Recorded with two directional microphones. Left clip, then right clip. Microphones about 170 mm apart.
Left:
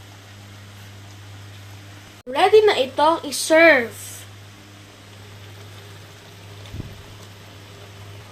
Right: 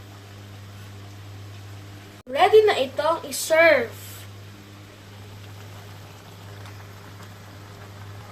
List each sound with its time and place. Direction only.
2.3 s speech: 45° left (ahead or behind)